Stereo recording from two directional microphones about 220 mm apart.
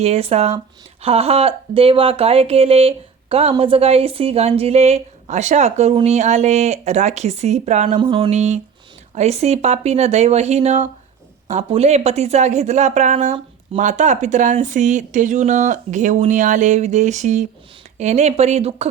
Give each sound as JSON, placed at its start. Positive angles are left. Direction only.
{"t": 0.0, "sound": "speech", "side_deg": -30}